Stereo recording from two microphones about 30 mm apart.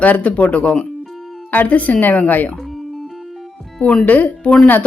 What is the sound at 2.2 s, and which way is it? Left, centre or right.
Speech, left.